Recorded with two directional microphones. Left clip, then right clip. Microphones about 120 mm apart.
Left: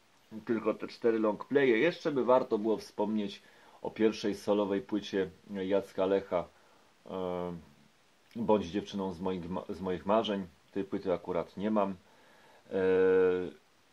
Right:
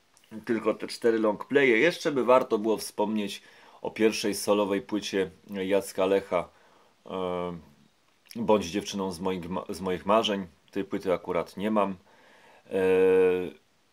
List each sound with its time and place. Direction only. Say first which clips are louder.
0.3 s speech: right 4 dB; 30° right (ahead or behind)